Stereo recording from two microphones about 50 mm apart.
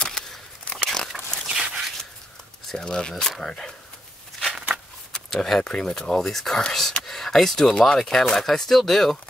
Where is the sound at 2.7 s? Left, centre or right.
Centre.